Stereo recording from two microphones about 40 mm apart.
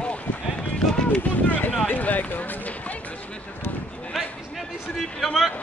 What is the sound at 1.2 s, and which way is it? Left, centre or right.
Speech, left.